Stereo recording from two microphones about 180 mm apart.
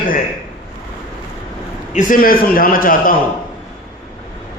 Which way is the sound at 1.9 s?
50° left (ahead or behind).